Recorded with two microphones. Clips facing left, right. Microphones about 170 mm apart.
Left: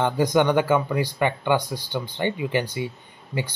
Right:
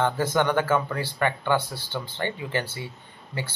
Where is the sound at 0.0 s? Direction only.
15° left (ahead or behind).